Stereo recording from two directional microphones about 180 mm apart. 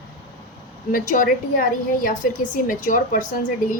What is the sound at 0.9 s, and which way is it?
A woman's voice, 50° left (ahead or behind).